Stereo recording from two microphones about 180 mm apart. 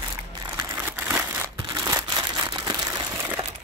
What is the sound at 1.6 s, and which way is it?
Crumpling, 20° right (ahead or behind).